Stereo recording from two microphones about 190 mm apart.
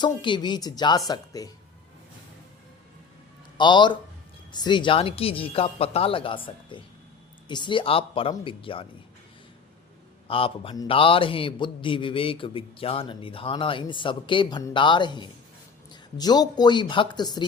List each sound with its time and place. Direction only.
0.0 s a man's voice: 25° left (ahead or behind)
3.6 s a man's voice: 25° left (ahead or behind)
10.2 s a man's voice: 30° left (ahead or behind)